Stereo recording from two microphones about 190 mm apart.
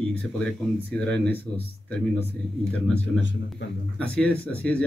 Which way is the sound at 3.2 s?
75° left (ahead or behind).